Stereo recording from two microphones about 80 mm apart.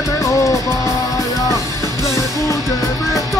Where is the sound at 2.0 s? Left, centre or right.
Left.